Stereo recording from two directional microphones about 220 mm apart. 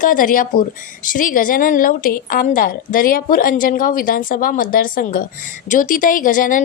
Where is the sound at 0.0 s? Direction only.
40° left (ahead or behind).